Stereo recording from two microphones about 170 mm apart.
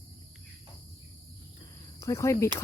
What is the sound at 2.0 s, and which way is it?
Speech, 15° left (ahead or behind).